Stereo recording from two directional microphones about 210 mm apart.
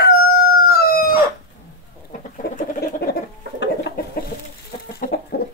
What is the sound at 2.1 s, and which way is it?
Bird, 40° left (ahead or behind).